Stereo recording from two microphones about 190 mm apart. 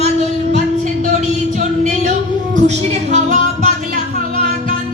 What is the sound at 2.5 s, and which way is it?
Music, 40° right (ahead or behind).